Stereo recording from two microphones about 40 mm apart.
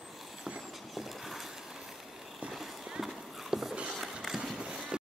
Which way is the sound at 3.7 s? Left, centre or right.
Right.